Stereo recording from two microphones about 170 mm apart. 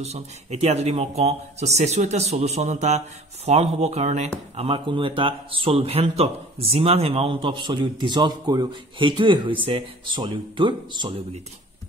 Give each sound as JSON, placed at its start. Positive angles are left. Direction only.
{"t": 0.0, "sound": "speech", "side_deg": -40}